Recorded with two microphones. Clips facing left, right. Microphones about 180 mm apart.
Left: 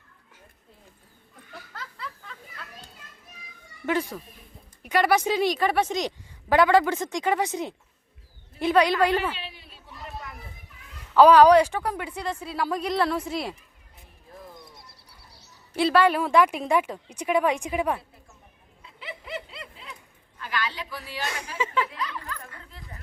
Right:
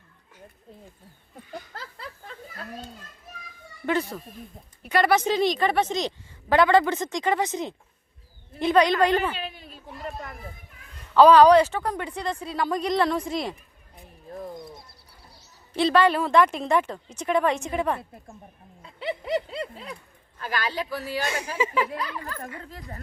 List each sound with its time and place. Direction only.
3.8 s a woman's voice: 10° left (ahead or behind)
9.4 s a sound: 45° right (ahead or behind)
11.1 s speech: 10° left (ahead or behind)
15.7 s a woman's voice: 10° left (ahead or behind)
18.8 s a sound: 40° right (ahead or behind)
20.4 s speech: 40° right (ahead or behind)
21.6 s speech: 10° right (ahead or behind)
21.8 s speech: 45° right (ahead or behind)